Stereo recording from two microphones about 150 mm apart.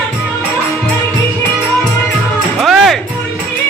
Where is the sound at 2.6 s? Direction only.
Centre (ahead or behind).